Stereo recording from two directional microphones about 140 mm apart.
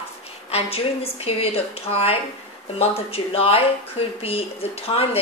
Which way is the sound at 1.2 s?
45° left (ahead or behind).